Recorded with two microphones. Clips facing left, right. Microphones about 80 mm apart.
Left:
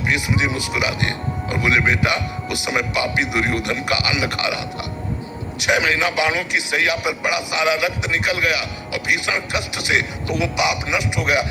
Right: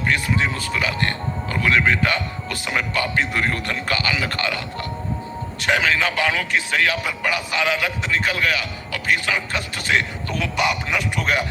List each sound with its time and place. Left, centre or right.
0.1 s a man's voice: centre